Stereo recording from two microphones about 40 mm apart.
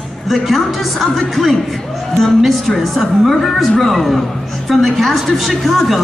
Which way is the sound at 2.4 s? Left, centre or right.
Centre.